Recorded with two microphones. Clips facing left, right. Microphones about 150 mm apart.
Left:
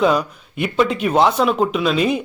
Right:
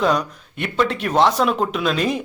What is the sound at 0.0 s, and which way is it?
Speech, 5° left (ahead or behind).